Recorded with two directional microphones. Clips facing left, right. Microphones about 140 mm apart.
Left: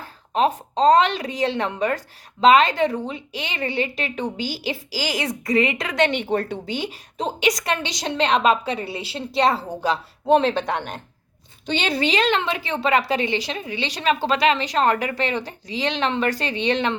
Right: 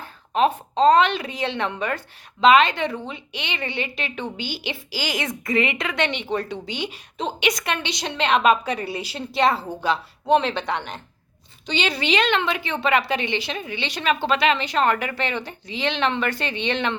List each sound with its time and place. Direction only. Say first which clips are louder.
0.0 s a woman's voice: even; 35° left (ahead or behind)